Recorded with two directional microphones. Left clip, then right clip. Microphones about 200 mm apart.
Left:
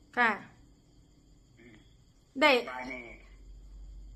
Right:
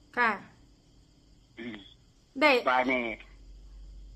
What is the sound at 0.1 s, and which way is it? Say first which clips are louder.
Speech: even; 5° right (ahead or behind).